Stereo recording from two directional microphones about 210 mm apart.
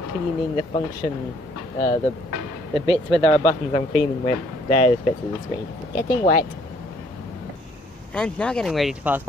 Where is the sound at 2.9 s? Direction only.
25° left (ahead or behind).